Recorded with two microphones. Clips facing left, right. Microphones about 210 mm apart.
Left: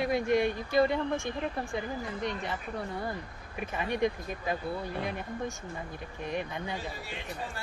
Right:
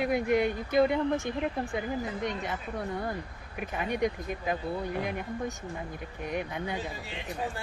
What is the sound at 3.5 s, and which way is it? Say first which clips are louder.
Speech: even; centre (ahead or behind).